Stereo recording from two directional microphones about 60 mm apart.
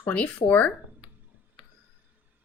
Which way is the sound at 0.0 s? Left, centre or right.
Left.